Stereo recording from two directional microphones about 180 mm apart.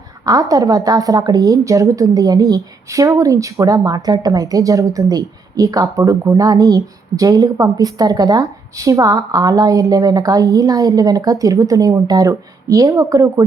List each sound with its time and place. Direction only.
0.3 s a woman's voice: 20° right (ahead or behind)